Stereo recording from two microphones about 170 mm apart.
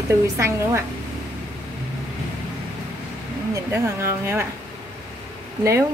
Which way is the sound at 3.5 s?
15° right (ahead or behind).